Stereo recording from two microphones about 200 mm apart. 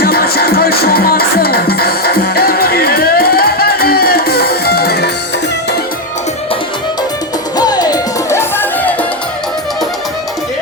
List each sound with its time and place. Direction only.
0.0 s music: 50° left (ahead or behind)
7.5 s music: 20° left (ahead or behind)